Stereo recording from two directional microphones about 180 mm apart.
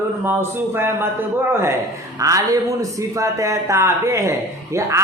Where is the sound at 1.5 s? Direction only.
15° right (ahead or behind).